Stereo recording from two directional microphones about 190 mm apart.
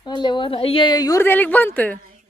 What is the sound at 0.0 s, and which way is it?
A woman's voice, 25° left (ahead or behind).